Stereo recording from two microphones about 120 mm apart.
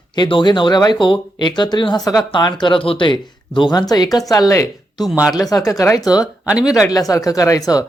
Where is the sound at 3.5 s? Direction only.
35° left (ahead or behind).